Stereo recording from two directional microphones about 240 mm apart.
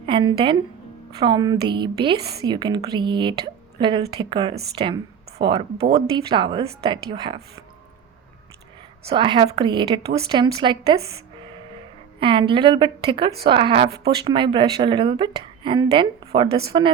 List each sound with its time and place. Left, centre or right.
0.0 s a woman's voice: right
9.0 s speech: centre
12.2 s speech: right